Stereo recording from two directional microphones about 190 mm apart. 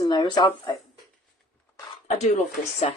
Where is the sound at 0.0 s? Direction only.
20° left (ahead or behind).